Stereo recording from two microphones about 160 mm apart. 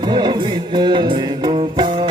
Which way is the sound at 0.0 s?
30° right (ahead or behind).